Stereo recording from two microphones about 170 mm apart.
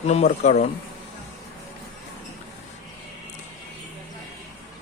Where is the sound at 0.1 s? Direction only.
40° left (ahead or behind).